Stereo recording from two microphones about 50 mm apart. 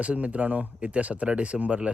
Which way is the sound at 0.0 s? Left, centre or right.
Right.